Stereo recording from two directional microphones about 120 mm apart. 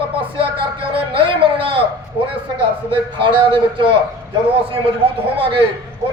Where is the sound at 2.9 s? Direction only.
50° right (ahead or behind).